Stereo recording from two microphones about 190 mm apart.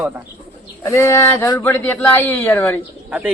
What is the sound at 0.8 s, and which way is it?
Speech, 15° left (ahead or behind).